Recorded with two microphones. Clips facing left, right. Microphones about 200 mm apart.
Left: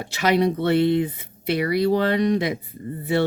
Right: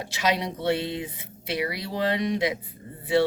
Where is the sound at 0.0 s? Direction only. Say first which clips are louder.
Left 7 dB; 60° left (ahead or behind).